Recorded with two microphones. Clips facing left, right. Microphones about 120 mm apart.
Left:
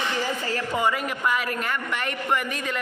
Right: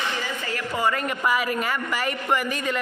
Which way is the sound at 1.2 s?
5° right (ahead or behind).